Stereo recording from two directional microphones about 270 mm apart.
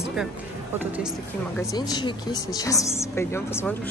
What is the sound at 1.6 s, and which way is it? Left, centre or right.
Speech, centre.